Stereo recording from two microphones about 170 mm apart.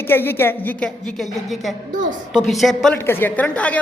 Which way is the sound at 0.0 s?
15° left (ahead or behind).